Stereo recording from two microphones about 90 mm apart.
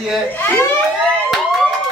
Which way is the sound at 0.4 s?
20° left (ahead or behind).